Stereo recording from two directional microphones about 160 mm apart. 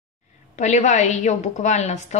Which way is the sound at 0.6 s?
45° left (ahead or behind).